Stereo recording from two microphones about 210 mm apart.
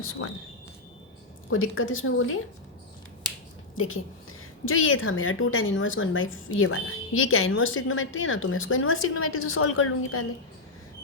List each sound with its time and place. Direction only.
1.5 s a woman's voice: 75° left (ahead or behind)
3.8 s a woman's voice: 75° left (ahead or behind)